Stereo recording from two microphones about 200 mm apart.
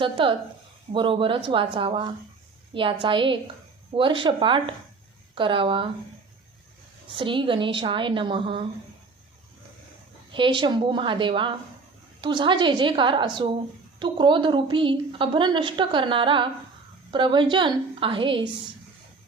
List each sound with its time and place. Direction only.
0.0 s a woman's voice: 25° right (ahead or behind)
7.2 s a woman's voice: 25° right (ahead or behind)
10.3 s a woman's voice: 25° right (ahead or behind)